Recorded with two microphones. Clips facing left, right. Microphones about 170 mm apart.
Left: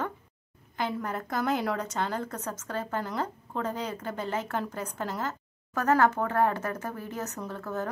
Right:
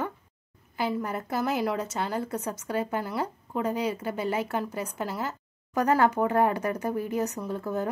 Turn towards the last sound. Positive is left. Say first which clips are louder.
# right 4 dB
turn(degrees=-15)  # may be behind; listen again after turning